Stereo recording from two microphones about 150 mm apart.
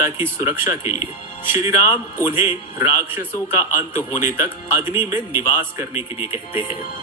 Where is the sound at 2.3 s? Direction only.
15° right (ahead or behind).